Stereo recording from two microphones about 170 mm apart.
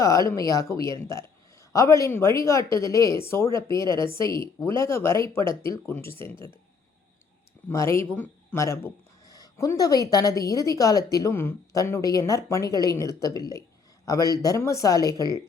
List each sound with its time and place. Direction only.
0.0 s speech: 20° left (ahead or behind)
7.7 s speech: 15° left (ahead or behind)